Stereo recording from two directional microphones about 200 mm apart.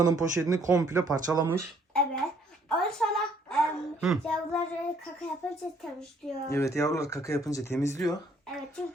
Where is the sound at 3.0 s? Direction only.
5° left (ahead or behind).